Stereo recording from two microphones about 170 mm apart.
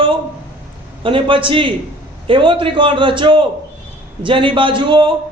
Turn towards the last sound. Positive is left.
turn(degrees=-30)  # may be behind; listen again after turning